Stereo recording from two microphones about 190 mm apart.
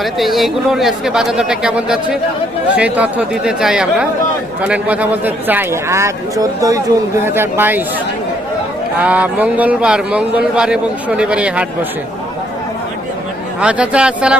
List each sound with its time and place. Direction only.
0.0 s a man's voice: centre (ahead or behind)
9.0 s a man's voice: 10° right (ahead or behind)
13.6 s speech: 5° right (ahead or behind)